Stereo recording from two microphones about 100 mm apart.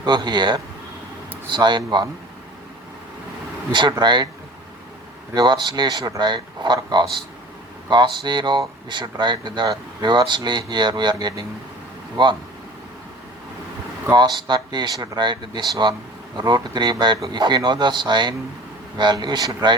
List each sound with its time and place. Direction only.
0.0 s speech: 50° right (ahead or behind)
3.7 s speech: 50° right (ahead or behind)
5.3 s speech: 45° right (ahead or behind)
14.2 s speech: 50° right (ahead or behind)